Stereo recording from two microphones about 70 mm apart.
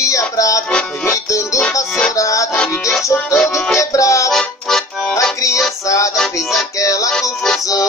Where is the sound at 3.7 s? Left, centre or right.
Left.